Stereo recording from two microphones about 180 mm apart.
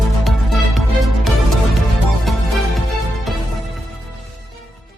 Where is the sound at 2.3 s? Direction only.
Centre (ahead or behind).